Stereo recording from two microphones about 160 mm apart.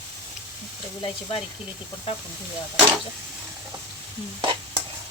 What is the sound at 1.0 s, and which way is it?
Speech, 35° left (ahead or behind).